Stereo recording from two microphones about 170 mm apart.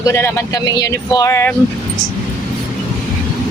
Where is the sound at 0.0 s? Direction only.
15° left (ahead or behind).